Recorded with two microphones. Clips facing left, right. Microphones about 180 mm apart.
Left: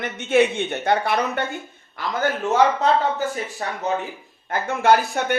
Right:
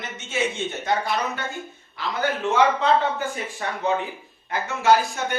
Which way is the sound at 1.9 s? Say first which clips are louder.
Left 2 dB; 45° left (ahead or behind).